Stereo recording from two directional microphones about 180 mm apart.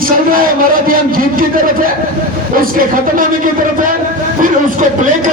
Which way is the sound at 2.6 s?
50° right (ahead or behind).